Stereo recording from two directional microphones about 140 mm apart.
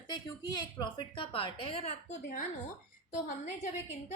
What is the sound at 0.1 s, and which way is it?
A woman's voice, 30° left (ahead or behind).